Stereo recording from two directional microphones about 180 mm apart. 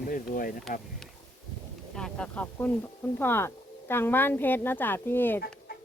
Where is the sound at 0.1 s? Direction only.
50° left (ahead or behind).